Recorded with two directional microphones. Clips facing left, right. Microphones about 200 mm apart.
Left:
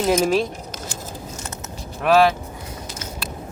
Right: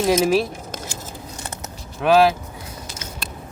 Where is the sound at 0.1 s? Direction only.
5° right (ahead or behind).